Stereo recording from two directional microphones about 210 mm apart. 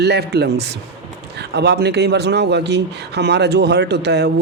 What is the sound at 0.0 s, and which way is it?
Speech, 50° right (ahead or behind).